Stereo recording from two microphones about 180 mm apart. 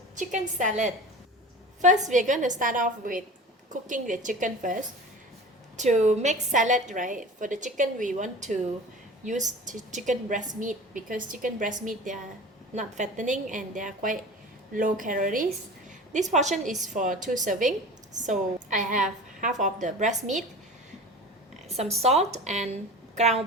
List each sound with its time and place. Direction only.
0.2 s a woman's voice: 45° right (ahead or behind)
21.7 s a woman's voice: 35° right (ahead or behind)